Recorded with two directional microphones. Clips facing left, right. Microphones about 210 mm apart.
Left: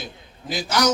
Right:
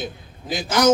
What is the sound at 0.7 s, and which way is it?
Speech, 50° right (ahead or behind).